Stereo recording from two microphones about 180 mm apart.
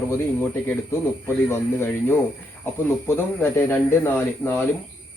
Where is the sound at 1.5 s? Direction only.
15° left (ahead or behind).